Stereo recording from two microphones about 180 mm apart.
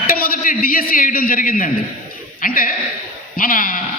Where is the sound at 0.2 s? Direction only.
55° left (ahead or behind).